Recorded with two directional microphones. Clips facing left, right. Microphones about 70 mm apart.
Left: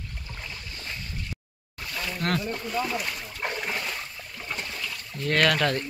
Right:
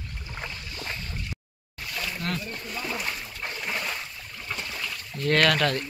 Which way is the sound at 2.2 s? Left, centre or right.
Left.